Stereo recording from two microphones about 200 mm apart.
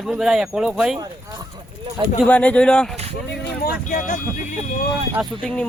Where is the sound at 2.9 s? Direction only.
30° right (ahead or behind).